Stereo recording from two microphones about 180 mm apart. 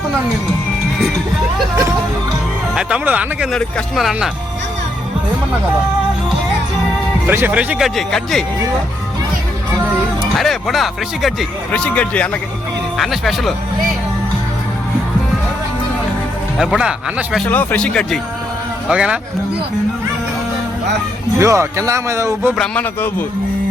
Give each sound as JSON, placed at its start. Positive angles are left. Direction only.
{"t": 2.7, "sound": "speech", "side_deg": -5}
{"t": 3.5, "sound": "speech", "side_deg": 5}
{"t": 7.3, "sound": "speech", "side_deg": -10}
{"t": 10.3, "sound": "speech", "side_deg": 0}
{"t": 16.6, "sound": "speech", "side_deg": -5}
{"t": 17.5, "sound": "speech", "side_deg": 10}
{"t": 18.9, "sound": "speech", "side_deg": -5}
{"t": 21.3, "sound": "speech", "side_deg": -15}
{"t": 22.5, "sound": "speech", "side_deg": 5}